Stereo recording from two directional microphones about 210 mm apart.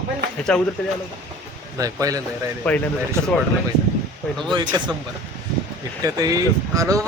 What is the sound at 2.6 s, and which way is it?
Speech, 5° left (ahead or behind).